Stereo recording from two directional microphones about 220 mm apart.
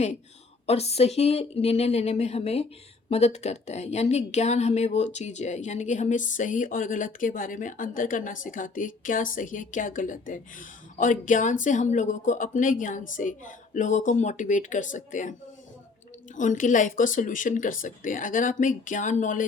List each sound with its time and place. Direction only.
0.7 s a woman's voice: 30° left (ahead or behind)